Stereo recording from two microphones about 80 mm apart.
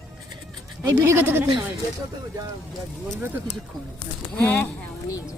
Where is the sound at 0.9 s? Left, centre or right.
Right.